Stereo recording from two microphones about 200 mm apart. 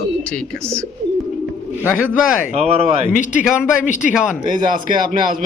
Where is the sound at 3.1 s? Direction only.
40° left (ahead or behind).